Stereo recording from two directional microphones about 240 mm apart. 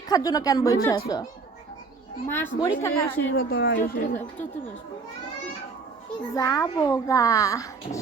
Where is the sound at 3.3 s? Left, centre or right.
Left.